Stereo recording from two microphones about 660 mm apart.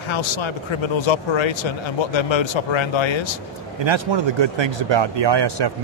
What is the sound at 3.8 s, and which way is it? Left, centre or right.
Speech, right.